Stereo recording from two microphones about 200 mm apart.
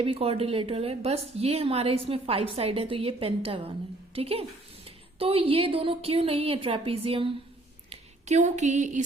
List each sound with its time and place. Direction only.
0.0 s a woman's voice: 30° right (ahead or behind)